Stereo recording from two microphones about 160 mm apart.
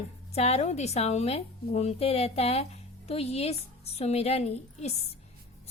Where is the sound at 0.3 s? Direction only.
40° left (ahead or behind).